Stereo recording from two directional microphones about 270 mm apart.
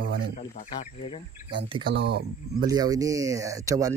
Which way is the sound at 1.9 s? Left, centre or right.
Right.